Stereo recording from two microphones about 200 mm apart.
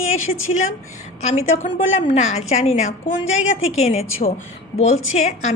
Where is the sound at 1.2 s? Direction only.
35° left (ahead or behind).